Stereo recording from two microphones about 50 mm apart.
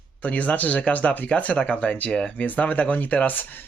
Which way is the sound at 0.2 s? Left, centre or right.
Left.